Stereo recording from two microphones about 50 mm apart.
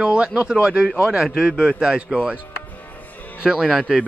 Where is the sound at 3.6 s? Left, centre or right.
Centre.